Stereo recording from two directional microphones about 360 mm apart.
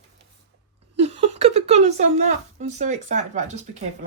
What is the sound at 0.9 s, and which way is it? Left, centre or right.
A woman's voice, centre.